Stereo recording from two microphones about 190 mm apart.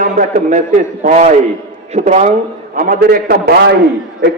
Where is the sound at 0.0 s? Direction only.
45° right (ahead or behind).